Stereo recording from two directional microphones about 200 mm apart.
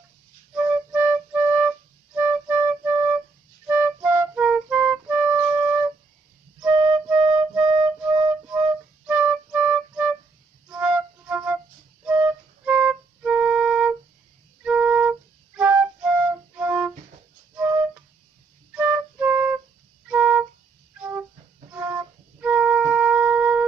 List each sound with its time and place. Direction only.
0.6 s flute: 5° right (ahead or behind)
3.6 s music: 5° right (ahead or behind)
6.7 s flute: 25° right (ahead or behind)
8.3 s flute: 5° right (ahead or behind)
20.1 s music: 5° right (ahead or behind)
22.4 s wind instrument: 5° right (ahead or behind)